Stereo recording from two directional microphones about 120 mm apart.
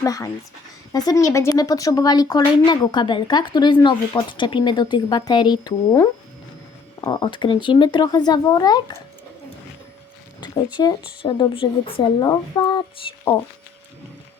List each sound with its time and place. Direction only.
0.0 s speech: 30° left (ahead or behind)
7.0 s speech: 40° left (ahead or behind)
10.4 s a sound: 35° left (ahead or behind)
10.8 s speech: 40° left (ahead or behind)
12.2 s speech: 35° left (ahead or behind)